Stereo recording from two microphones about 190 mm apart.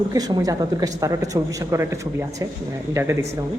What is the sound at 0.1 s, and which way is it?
Speech, 20° right (ahead or behind).